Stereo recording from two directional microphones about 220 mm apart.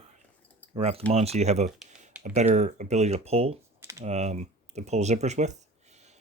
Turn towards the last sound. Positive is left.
turn(degrees=-30)  # may be behind; listen again after turning